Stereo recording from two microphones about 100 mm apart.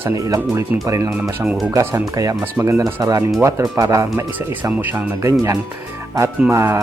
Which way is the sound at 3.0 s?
35° right (ahead or behind).